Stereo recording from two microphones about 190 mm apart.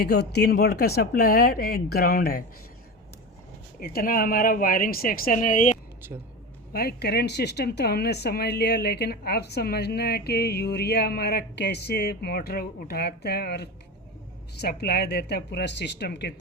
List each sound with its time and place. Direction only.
0.0 s speech: 60° left (ahead or behind)
3.8 s speech: 50° left (ahead or behind)
6.7 s speech: 55° left (ahead or behind)